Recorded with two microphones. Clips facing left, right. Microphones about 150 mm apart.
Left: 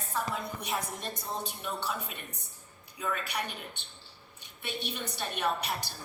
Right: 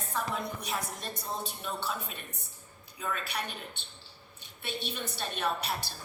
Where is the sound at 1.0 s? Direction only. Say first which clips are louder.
Even; 15° left (ahead or behind).